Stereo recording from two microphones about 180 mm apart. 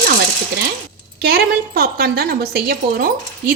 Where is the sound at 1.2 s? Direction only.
60° right (ahead or behind).